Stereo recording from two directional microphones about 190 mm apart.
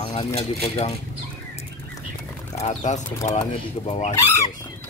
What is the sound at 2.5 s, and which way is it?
Speech, 40° left (ahead or behind).